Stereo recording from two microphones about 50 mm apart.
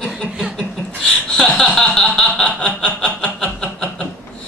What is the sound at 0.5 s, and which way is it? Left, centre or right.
Chuckle, centre.